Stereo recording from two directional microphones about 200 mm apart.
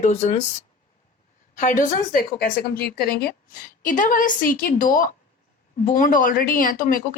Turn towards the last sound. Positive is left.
turn(degrees=45)  # may be behind; listen again after turning